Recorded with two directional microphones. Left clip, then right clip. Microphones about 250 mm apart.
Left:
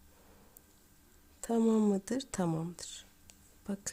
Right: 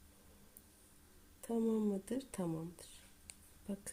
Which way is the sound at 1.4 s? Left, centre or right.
Left.